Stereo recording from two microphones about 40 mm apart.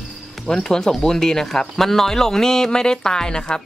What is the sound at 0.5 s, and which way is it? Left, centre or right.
Speech, centre.